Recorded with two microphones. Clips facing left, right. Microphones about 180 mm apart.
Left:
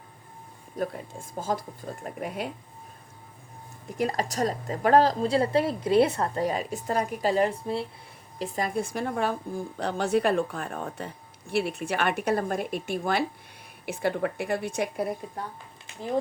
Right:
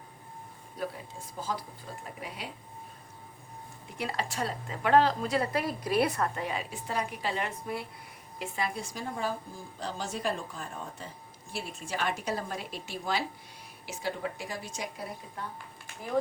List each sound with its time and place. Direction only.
0.8 s speech: 50° left (ahead or behind)
3.8 s a woman's voice: 45° left (ahead or behind)
15.9 s a sound: 20° left (ahead or behind)